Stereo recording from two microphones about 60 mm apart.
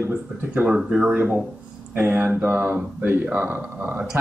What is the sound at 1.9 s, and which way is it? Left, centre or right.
Speech, right.